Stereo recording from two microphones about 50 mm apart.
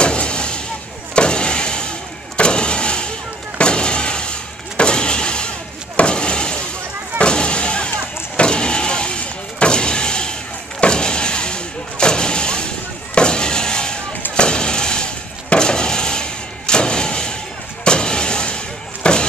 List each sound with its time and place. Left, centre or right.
0.0 s vehicle: centre
7.2 s a sound: centre
8.4 s vehicle: centre
15.5 s a sound: centre
17.8 s vehicle: centre
19.0 s slam: left